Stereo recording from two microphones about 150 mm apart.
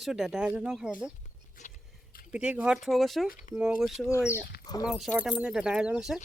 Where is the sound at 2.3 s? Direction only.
10° right (ahead or behind).